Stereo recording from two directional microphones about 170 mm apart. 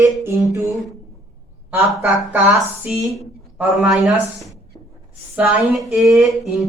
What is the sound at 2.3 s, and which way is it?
A woman's voice, 10° right (ahead or behind).